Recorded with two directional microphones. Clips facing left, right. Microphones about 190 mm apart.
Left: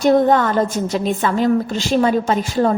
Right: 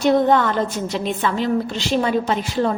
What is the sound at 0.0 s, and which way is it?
A woman's voice, 45° left (ahead or behind).